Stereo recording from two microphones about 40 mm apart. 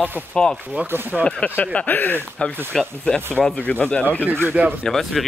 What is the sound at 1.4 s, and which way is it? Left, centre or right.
Speech, left.